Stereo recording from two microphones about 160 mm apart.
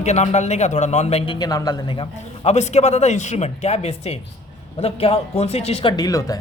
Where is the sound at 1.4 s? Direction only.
25° left (ahead or behind).